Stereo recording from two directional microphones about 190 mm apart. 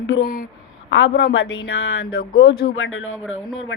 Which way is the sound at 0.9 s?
80° left.